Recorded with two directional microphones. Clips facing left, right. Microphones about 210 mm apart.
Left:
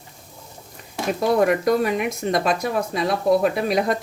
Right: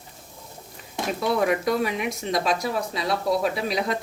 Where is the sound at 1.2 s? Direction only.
45° left (ahead or behind).